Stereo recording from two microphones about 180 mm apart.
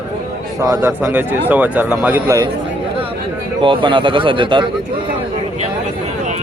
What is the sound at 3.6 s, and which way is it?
Speech, 30° right (ahead or behind).